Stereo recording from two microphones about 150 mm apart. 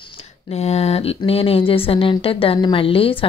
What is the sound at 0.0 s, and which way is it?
Speech, 45° left (ahead or behind).